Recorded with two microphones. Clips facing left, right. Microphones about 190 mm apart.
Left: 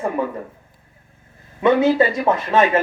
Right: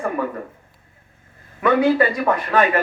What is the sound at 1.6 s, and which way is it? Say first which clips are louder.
A man's voice: left 1 dB; 25° left (ahead or behind).